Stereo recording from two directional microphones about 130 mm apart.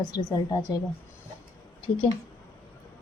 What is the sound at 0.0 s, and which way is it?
Speech, 30° left (ahead or behind).